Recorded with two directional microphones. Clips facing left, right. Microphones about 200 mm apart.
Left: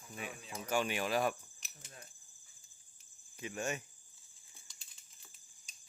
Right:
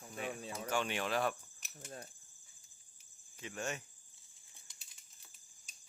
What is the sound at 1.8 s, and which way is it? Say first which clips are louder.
Speech: right 8 dB; 45° right (ahead or behind).